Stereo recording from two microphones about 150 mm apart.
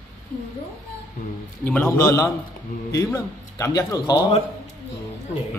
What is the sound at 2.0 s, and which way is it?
A man's voice, 25° left (ahead or behind).